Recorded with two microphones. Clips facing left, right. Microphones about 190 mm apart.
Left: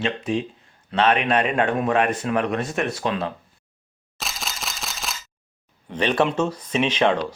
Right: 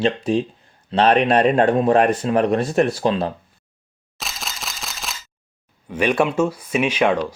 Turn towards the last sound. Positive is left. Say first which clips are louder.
# right 2 dB
turn(degrees=-10)  # may be behind; listen again after turning